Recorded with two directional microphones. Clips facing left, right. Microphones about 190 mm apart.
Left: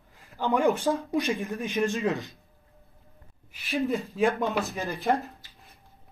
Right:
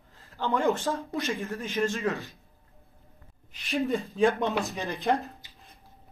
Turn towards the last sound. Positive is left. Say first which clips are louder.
# left 1 dB
turn(degrees=0)  # may be behind; listen again after turning